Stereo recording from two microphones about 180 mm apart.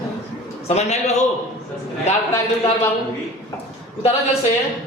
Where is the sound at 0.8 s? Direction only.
40° left (ahead or behind).